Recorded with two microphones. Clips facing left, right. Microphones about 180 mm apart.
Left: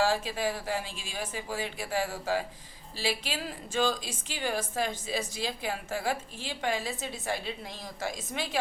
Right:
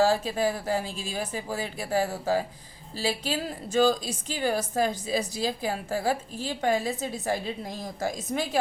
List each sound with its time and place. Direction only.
0.0 s a woman's voice: 40° right (ahead or behind)